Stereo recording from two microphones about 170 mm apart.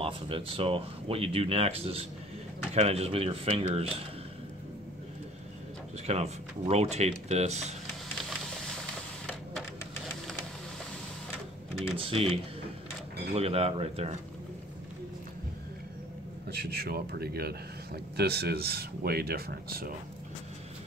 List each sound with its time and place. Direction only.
0.0 s speech: 35° right (ahead or behind)
6.0 s speech: 40° right (ahead or behind)
9.2 s a sound: 5° left (ahead or behind)
12.0 s speech: 35° right (ahead or behind)
16.4 s speech: 70° right (ahead or behind)